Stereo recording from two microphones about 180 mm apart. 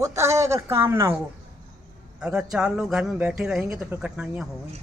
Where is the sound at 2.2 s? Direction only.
5° right (ahead or behind).